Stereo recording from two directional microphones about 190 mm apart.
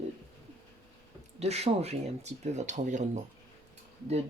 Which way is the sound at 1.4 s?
35° right (ahead or behind).